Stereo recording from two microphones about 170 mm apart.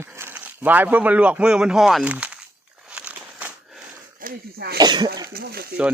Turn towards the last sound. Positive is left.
turn(degrees=-65)  # may be behind; listen again after turning